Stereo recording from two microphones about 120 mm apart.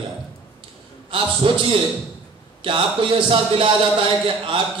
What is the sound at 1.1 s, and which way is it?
A man's voice, 50° right (ahead or behind).